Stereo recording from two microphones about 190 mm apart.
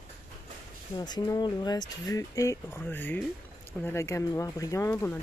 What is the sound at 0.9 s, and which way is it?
Speech, 20° left (ahead or behind).